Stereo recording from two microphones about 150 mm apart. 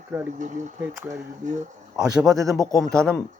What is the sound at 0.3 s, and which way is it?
Speech, 55° right (ahead or behind).